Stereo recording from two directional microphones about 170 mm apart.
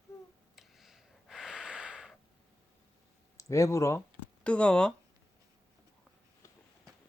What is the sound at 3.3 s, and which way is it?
Speech, 20° left (ahead or behind).